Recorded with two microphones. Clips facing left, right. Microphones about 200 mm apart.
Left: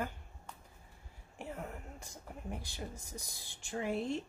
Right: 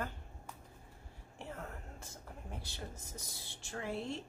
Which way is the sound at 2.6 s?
15° left (ahead or behind).